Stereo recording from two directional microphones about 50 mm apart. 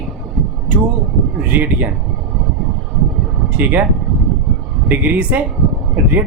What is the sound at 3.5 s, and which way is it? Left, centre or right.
Speech, right.